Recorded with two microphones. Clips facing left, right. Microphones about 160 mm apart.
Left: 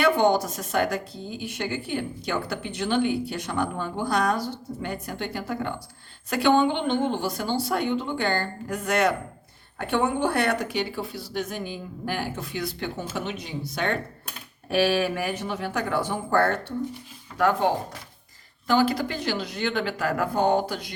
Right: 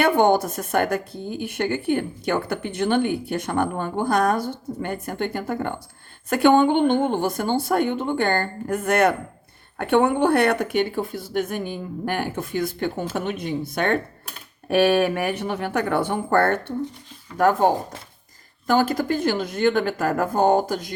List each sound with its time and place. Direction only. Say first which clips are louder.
0.0 s speech: right 3 dB; 55° right (ahead or behind)
17.3 s speech: right 4 dB; 45° right (ahead or behind)
18.7 s speech: right 2 dB; 45° right (ahead or behind)